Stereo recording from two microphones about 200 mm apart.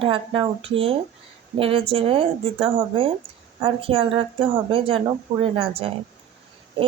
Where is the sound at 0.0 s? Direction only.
25° right (ahead or behind).